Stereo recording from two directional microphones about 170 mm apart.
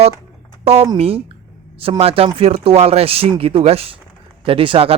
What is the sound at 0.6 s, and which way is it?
Speech, 35° right (ahead or behind).